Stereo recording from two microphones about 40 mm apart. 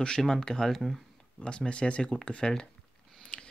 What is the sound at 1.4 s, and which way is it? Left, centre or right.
Speech, left.